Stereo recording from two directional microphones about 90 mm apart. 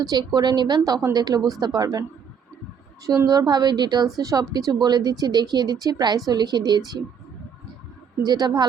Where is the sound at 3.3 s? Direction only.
50° right (ahead or behind).